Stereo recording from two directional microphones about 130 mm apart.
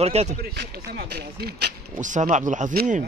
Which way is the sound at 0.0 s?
55° right (ahead or behind).